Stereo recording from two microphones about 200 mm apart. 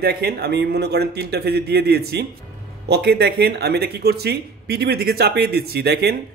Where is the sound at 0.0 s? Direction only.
50° right (ahead or behind).